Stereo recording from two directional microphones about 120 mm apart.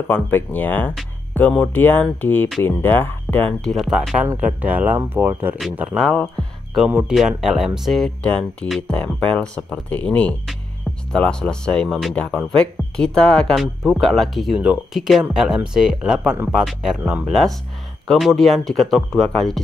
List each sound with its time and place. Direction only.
0.1 s speech: 15° left (ahead or behind)
3.7 s speech: centre (ahead or behind)
6.9 s speech: 5° right (ahead or behind)